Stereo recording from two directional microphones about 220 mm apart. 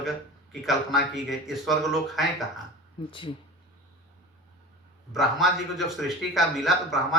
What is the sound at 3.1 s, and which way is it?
Speech, 20° left (ahead or behind).